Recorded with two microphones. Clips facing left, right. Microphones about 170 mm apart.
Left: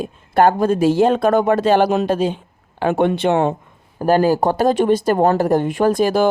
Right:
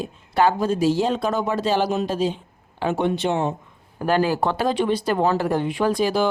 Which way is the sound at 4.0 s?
40° left (ahead or behind).